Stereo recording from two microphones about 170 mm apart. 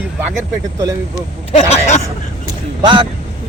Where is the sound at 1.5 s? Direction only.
40° left (ahead or behind).